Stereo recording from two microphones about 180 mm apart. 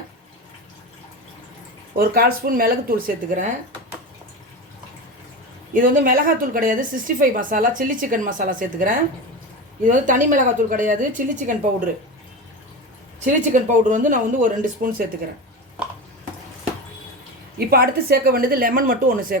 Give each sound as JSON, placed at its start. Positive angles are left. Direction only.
{"t": 2.0, "sound": "a woman's voice", "side_deg": -55}
{"t": 5.7, "sound": "a woman's voice", "side_deg": -50}
{"t": 13.2, "sound": "a woman's voice", "side_deg": -45}
{"t": 17.6, "sound": "a woman's voice", "side_deg": -55}